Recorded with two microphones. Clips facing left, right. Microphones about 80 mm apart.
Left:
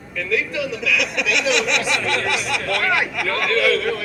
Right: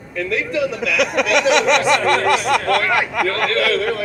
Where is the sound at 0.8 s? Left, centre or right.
Right.